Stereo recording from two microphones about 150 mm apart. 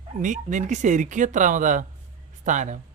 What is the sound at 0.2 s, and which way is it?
Speech, 55° right (ahead or behind).